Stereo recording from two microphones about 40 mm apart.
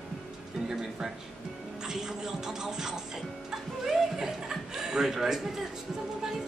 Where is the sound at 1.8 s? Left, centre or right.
Centre.